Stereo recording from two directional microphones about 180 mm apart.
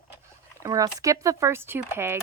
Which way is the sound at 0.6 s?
20° right (ahead or behind).